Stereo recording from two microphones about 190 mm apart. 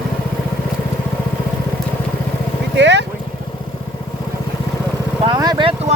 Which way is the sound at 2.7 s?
65° right (ahead or behind).